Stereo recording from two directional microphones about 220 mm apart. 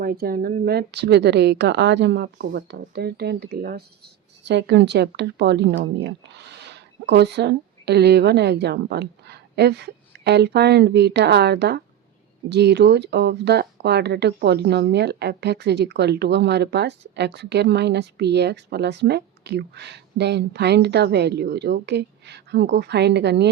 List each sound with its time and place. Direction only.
0.0 s a woman's voice: 40° right (ahead or behind)